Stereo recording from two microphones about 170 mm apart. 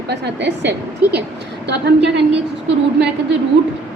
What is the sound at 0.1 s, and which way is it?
A woman's voice, 90° right.